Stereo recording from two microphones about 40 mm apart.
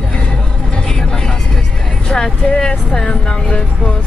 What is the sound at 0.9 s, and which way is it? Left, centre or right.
Vehicle, centre.